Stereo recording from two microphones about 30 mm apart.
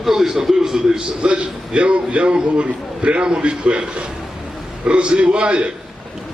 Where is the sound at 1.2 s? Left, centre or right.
Right.